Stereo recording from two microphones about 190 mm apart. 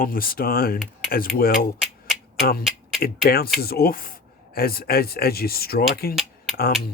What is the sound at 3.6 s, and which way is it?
Speech, 55° left (ahead or behind).